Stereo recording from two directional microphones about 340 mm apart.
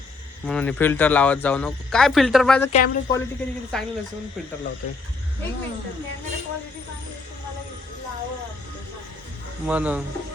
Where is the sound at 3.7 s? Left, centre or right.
Centre.